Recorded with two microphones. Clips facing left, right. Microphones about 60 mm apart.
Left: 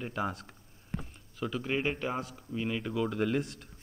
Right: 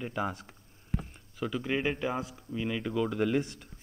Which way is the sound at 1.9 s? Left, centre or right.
Centre.